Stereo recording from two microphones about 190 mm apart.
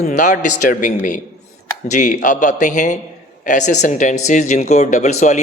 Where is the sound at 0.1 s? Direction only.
40° left (ahead or behind).